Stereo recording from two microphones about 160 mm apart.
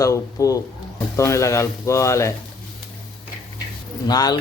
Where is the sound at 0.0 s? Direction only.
20° left (ahead or behind).